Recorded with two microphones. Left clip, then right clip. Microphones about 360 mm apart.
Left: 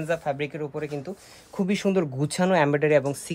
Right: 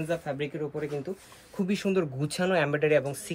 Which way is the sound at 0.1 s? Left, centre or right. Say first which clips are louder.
Left 6 dB; centre.